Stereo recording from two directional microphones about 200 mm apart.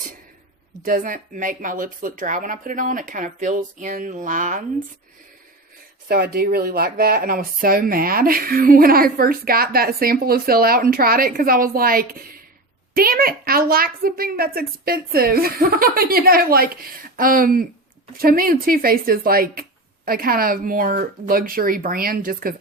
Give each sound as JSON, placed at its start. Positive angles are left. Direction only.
{"t": 0.9, "sound": "speech", "side_deg": -45}
{"t": 6.3, "sound": "speech", "side_deg": -50}